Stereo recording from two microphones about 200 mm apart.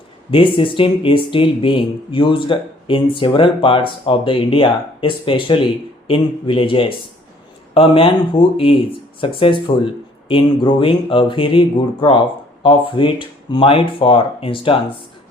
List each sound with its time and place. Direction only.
0.3 s speech: 25° left (ahead or behind)